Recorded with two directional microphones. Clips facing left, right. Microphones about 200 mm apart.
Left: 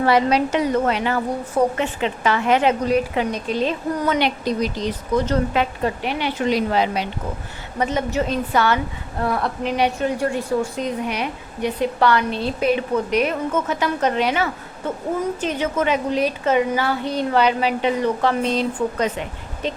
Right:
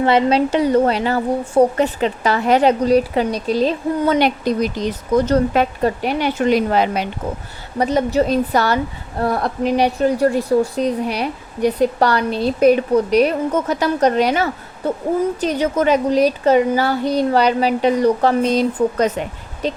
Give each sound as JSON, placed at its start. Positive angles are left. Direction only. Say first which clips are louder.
{"t": 0.0, "sound": "a woman's voice", "louder": "right 3 dB", "side_deg": -25}
{"t": 4.4, "sound": "speech", "louder": "right 3 dB", "side_deg": -50}
{"t": 7.8, "sound": "a woman's voice", "louder": "right 5 dB", "side_deg": -35}